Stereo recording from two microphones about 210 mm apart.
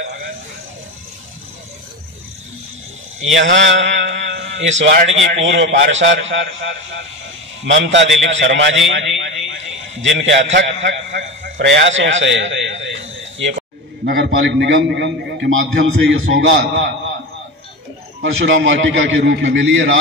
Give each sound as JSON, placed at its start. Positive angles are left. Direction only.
{"t": 3.3, "sound": "a man's voice", "side_deg": -60}
{"t": 14.0, "sound": "a man's voice", "side_deg": -55}
{"t": 18.2, "sound": "a man's voice", "side_deg": -65}